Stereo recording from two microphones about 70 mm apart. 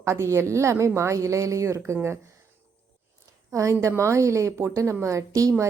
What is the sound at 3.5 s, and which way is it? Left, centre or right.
A woman's voice, right.